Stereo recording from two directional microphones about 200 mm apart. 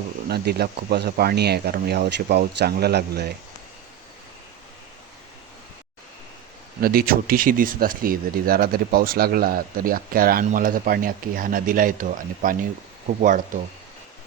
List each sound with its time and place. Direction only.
0.3 s speech: 55° right (ahead or behind)
6.8 s speech: 45° right (ahead or behind)